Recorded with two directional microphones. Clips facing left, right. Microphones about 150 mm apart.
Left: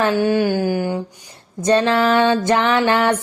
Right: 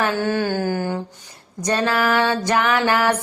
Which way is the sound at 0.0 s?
15° left (ahead or behind).